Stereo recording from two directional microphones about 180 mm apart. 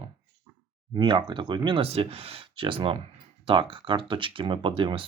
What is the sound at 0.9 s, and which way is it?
Speech, 25° right (ahead or behind).